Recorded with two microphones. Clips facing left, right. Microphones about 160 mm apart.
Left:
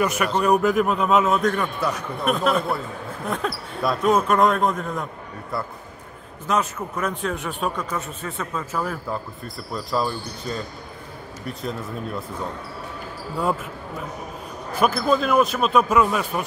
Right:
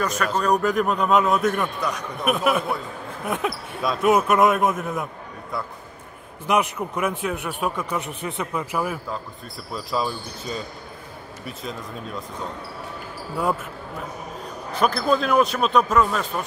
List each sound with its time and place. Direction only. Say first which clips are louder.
0.0 s a man's voice: left 2 dB; 10° left (ahead or behind)
2.2 s a man's voice: even; 5° right (ahead or behind)
3.8 s a man's voice: even; centre (ahead or behind)
6.4 s a man's voice: right 2 dB; 15° right (ahead or behind)
7.8 s a man's voice: right 1 dB; 15° right (ahead or behind); by 12.2 s centre (ahead or behind)
14.8 s a man's voice: left 1 dB; 5° left (ahead or behind)